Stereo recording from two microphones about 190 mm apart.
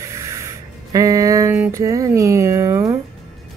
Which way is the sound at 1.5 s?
10° right (ahead or behind).